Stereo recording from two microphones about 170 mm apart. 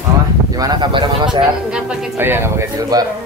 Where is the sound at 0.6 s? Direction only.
25° right (ahead or behind).